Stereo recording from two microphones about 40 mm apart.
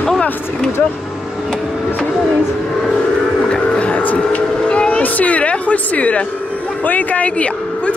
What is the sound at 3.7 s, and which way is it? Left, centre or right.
Speech, left.